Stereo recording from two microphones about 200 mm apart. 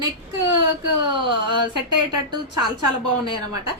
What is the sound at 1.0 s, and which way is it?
Speech, 25° right (ahead or behind).